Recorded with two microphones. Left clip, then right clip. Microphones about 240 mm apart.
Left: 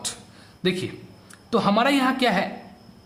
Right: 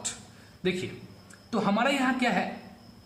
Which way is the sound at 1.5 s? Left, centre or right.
Left.